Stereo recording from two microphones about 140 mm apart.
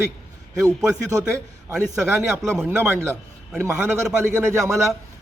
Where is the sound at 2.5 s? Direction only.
15° right (ahead or behind).